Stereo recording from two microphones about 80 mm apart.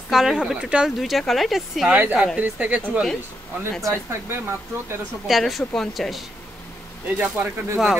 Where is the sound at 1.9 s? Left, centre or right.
Right.